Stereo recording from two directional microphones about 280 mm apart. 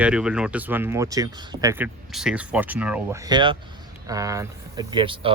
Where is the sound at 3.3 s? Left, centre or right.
Centre.